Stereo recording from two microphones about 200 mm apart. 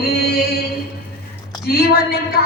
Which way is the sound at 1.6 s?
50° left (ahead or behind).